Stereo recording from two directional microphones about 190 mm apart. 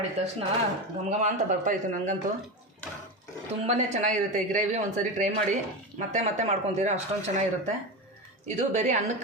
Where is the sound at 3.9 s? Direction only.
40° right (ahead or behind).